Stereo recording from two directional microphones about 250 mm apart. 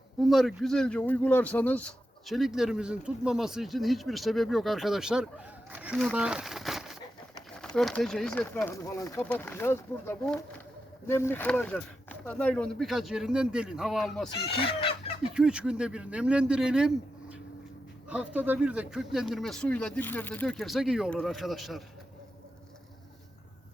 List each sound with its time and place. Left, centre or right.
0.2 s speech: centre
14.4 s speech: left
15.4 s speech: centre